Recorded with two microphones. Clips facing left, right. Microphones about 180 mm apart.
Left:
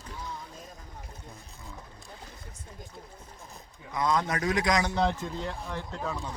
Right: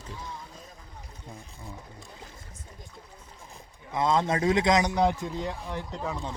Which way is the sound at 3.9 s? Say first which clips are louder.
Right 3 dB; 25° right (ahead or behind).